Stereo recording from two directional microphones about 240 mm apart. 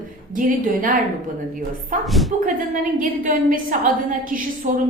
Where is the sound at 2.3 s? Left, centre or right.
Right.